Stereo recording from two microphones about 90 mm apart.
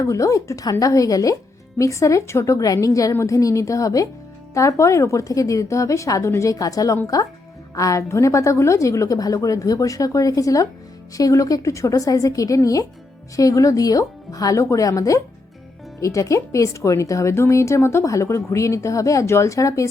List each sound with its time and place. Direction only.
0.0 s speech: 35° left (ahead or behind)